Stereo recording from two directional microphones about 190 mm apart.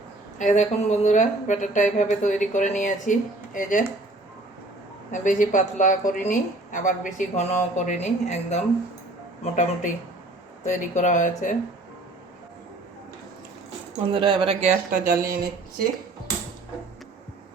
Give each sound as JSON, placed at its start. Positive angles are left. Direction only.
{"t": 0.3, "sound": "speech", "side_deg": 40}
{"t": 5.1, "sound": "a woman's voice", "side_deg": 45}
{"t": 14.1, "sound": "speech", "side_deg": -25}
{"t": 14.8, "sound": "speech", "side_deg": -50}